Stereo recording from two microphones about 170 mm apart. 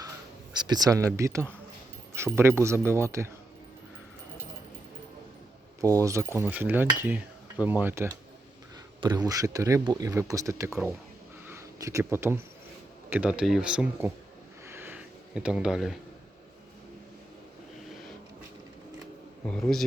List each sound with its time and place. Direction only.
0.5 s speech: 25° right (ahead or behind)
6.0 s speech: 15° right (ahead or behind)
9.0 s speech: 25° right (ahead or behind)
11.4 s a sound: 15° right (ahead or behind)
13.1 s speech: 10° right (ahead or behind)
14.7 s a sound: 10° right (ahead or behind)
19.5 s speech: 5° left (ahead or behind)